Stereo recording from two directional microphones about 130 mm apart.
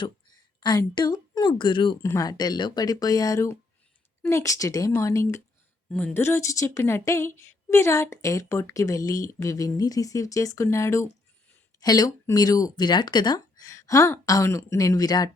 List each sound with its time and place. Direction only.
0.0 s speech: 35° left (ahead or behind)
2.0 s a woman's voice: 25° left (ahead or behind)
5.9 s a woman's voice: 5° left (ahead or behind)
6.1 s a woman's voice: 20° left (ahead or behind)